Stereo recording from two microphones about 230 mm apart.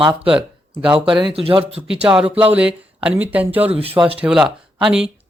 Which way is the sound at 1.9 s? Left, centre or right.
Centre.